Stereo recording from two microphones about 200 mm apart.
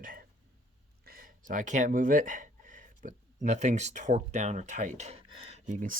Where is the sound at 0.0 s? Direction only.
45° right (ahead or behind).